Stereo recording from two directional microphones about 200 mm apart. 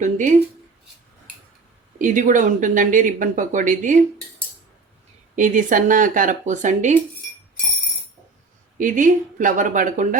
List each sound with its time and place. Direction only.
0.0 s speech: 40° right (ahead or behind)
2.0 s speech: 40° right (ahead or behind)
5.4 s speech: 40° right (ahead or behind)
8.8 s speech: 40° right (ahead or behind)